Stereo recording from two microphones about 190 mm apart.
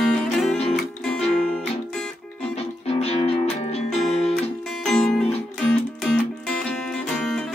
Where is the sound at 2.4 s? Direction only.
35° left (ahead or behind).